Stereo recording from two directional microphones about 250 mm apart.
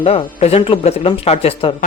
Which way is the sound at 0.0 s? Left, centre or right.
Left.